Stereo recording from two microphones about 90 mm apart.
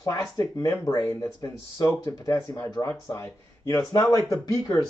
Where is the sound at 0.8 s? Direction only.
50° left (ahead or behind).